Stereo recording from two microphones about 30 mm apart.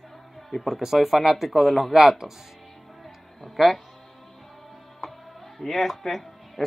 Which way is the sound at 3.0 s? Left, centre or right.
Centre.